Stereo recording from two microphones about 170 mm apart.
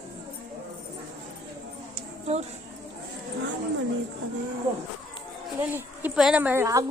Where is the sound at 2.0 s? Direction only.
40° right (ahead or behind).